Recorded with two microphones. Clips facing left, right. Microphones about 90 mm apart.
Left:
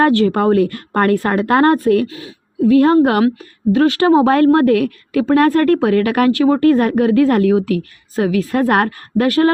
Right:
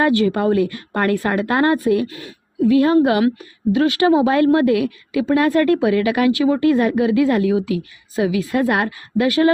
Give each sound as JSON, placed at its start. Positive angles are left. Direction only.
{"t": 0.0, "sound": "a woman's voice", "side_deg": 45}
{"t": 2.0, "sound": "a woman's voice", "side_deg": 20}
{"t": 2.6, "sound": "a woman's voice", "side_deg": 40}